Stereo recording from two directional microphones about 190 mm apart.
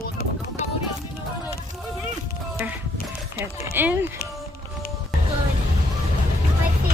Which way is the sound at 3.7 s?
10° right (ahead or behind).